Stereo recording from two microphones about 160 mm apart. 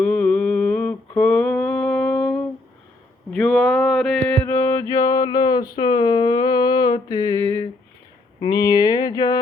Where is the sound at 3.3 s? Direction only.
5° left (ahead or behind).